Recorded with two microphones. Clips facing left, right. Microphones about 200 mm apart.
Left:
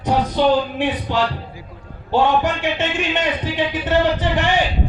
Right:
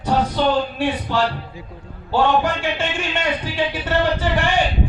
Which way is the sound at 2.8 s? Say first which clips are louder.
Left 2 dB; 20° left (ahead or behind).